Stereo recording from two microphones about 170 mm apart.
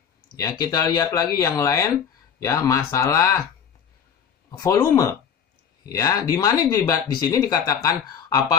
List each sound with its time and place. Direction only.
0.4 s speech: 20° left (ahead or behind)
4.5 s speech: 20° left (ahead or behind)